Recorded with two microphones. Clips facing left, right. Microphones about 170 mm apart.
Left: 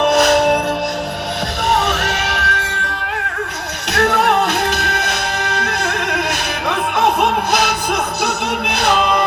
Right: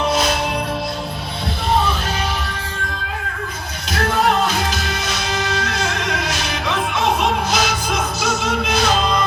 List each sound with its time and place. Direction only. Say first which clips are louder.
0.0 s music: left 7 dB; 65° left (ahead or behind)
1.7 s music: left 1 dB; 75° left (ahead or behind)
3.9 s music: left 3 dB; 70° left (ahead or behind)